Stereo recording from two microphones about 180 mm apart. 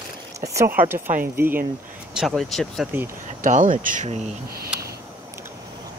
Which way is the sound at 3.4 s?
45° right (ahead or behind).